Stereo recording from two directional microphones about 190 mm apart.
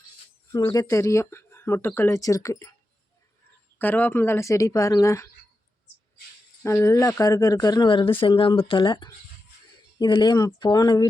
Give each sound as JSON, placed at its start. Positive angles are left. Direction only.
{"t": 0.5, "sound": "speech", "side_deg": 20}
{"t": 3.8, "sound": "speech", "side_deg": 10}
{"t": 6.6, "sound": "speech", "side_deg": 15}